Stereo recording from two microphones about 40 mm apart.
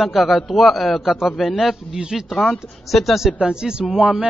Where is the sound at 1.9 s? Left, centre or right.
Right.